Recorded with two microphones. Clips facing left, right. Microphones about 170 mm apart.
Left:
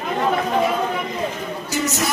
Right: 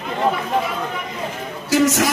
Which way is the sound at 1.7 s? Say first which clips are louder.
Right 8 dB; 90° right.